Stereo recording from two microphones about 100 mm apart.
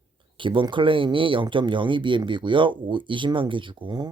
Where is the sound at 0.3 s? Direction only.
55° right (ahead or behind).